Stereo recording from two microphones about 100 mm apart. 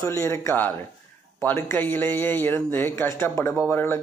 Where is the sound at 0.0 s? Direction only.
30° left (ahead or behind).